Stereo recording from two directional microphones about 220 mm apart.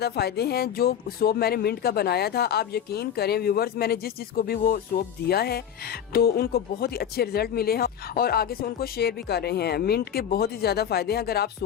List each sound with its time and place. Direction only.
0.0 s speech: 45° left (ahead or behind)